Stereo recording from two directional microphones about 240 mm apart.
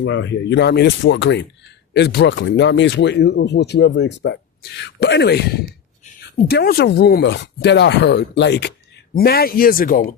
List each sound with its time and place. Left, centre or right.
0.0 s speech: left
6.5 s speech: left